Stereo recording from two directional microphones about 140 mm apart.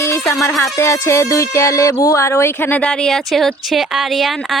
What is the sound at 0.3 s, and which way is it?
Speech, 20° left (ahead or behind).